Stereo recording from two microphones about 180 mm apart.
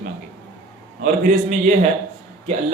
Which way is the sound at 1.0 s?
50° right (ahead or behind).